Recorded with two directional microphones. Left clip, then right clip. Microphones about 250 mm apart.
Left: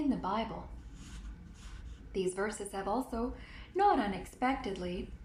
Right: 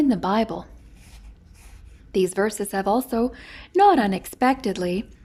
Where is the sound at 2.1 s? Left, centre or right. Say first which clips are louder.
Right 13 dB; right.